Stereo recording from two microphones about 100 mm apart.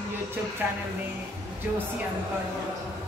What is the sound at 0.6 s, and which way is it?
Speech, 20° right (ahead or behind).